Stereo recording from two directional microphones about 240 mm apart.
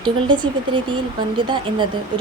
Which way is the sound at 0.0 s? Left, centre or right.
Centre.